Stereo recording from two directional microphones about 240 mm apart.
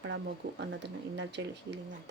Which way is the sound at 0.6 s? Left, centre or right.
Right.